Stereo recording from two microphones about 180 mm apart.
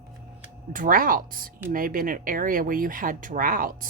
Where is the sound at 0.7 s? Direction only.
50° right (ahead or behind).